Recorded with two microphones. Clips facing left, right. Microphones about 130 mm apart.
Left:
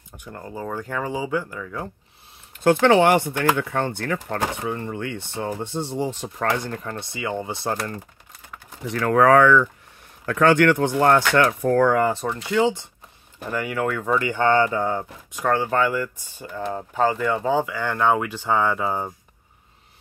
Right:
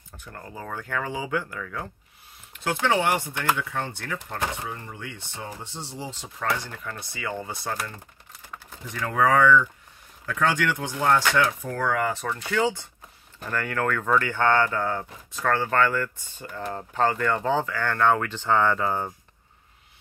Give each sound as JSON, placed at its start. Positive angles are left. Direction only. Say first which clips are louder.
{"t": 0.1, "sound": "speech", "louder": "left 5 dB", "side_deg": 15}
{"t": 2.5, "sound": "a sound", "louder": "left 11 dB", "side_deg": 50}
{"t": 2.8, "sound": "speech", "louder": "left 6 dB", "side_deg": 60}
{"t": 6.8, "sound": "speech", "louder": "left 5 dB", "side_deg": 30}
{"t": 8.8, "sound": "speech", "louder": "left 7 dB", "side_deg": 65}
{"t": 10.2, "sound": "speech", "louder": "left 8 dB", "side_deg": 60}
{"t": 11.6, "sound": "speech", "louder": "left 9 dB", "side_deg": 45}
{"t": 12.0, "sound": "speech", "louder": "left 6 dB", "side_deg": 30}
{"t": 12.3, "sound": "speech", "louder": "left 4 dB", "side_deg": 20}